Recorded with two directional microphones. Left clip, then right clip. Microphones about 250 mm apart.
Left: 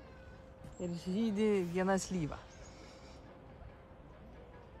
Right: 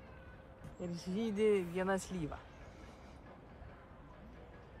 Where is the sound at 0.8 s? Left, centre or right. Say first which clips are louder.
Left 2 dB; left.